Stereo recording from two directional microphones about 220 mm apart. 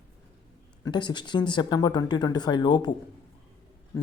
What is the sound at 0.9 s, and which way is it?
A woman's voice, 20° left (ahead or behind).